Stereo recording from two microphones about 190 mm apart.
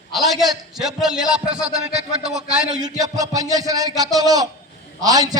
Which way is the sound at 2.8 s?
20° right (ahead or behind).